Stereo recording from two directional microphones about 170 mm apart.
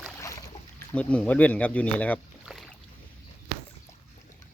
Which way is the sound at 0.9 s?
5° left (ahead or behind).